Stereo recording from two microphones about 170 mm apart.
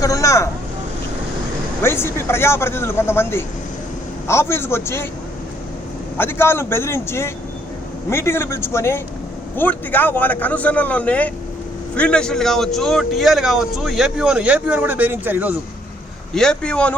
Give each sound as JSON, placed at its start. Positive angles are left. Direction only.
{"t": 0.0, "sound": "vehicle", "side_deg": 20}
{"t": 1.8, "sound": "a man's voice", "side_deg": 15}
{"t": 6.1, "sound": "a man's voice", "side_deg": 15}
{"t": 16.3, "sound": "a man's voice", "side_deg": 5}